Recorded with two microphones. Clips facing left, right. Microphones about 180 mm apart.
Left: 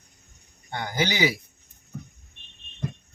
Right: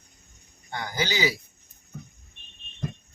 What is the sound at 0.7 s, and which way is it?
Speech, 30° left (ahead or behind).